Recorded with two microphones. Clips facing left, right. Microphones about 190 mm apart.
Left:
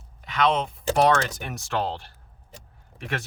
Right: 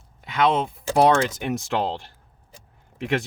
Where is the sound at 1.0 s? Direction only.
20° right (ahead or behind).